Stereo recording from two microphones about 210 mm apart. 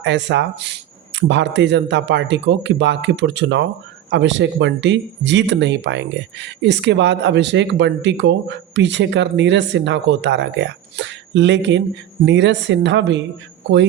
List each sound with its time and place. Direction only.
0.0 s speech: 55° right (ahead or behind)